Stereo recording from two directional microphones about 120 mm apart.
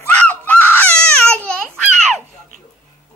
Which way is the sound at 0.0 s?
15° left (ahead or behind).